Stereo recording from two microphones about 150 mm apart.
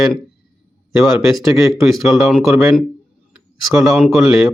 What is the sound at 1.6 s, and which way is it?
Speech, 20° right (ahead or behind).